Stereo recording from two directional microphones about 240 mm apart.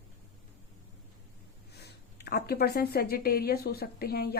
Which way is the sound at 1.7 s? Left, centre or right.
Left.